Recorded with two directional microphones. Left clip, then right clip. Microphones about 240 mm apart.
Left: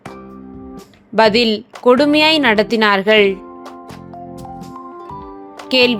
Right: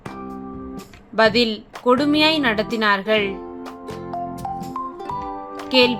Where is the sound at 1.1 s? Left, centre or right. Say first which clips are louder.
Left 4 dB; left.